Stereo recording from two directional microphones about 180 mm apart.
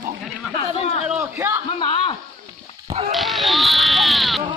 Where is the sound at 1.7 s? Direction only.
30° left (ahead or behind).